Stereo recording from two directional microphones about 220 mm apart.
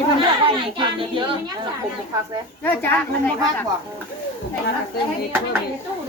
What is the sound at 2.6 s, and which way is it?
Speech, 10° left (ahead or behind).